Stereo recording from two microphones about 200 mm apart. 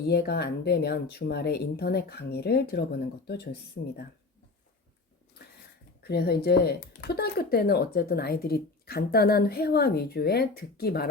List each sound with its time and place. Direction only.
0.1 s speech: 55° left (ahead or behind)
6.0 s speech: 55° left (ahead or behind)